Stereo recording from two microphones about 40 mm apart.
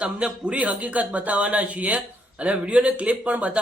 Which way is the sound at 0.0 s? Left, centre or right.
Right.